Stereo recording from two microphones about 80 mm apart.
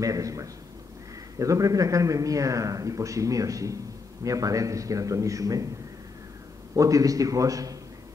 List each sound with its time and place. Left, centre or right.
0.0 s a man's voice: right
6.7 s a man's voice: right